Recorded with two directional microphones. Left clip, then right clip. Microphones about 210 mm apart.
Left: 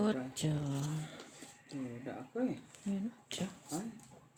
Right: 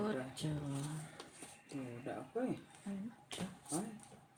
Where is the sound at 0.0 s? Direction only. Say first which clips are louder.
Left 5 dB; 50° left (ahead or behind).